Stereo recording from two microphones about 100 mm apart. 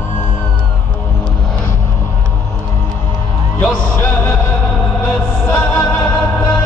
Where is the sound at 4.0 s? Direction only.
25° left (ahead or behind).